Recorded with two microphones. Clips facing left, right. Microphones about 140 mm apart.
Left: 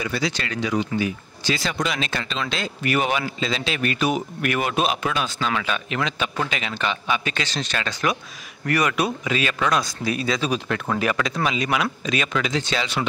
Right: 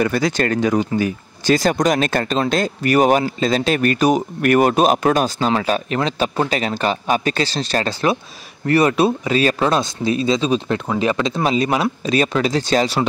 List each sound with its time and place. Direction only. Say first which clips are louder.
0.0 s speech: right 8 dB; 50° right (ahead or behind); by 11.4 s 25° right (ahead or behind)
11.4 s speech: right 6 dB; 35° right (ahead or behind)